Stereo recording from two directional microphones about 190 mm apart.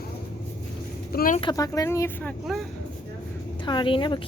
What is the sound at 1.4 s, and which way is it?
Speech, 20° left (ahead or behind).